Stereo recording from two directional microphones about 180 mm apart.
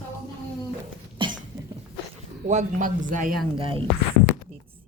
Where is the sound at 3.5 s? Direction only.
30° right (ahead or behind).